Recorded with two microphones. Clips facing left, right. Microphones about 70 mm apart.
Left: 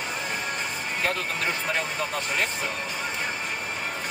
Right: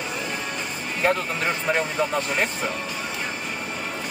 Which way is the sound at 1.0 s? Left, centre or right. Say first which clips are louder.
Right 6 dB; right.